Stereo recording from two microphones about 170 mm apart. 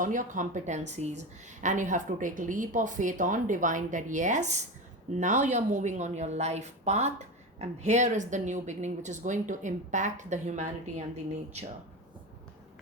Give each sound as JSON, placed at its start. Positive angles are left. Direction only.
{"t": 0.0, "sound": "a woman's voice", "side_deg": -50}